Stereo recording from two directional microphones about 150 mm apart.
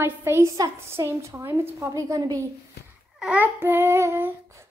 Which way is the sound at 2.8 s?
90° left.